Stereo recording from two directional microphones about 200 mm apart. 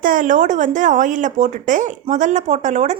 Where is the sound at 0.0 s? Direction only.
40° right (ahead or behind).